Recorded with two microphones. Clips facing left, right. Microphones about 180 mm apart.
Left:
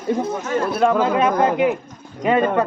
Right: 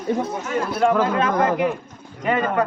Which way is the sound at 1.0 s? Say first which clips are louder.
Left 3 dB; 25° left (ahead or behind).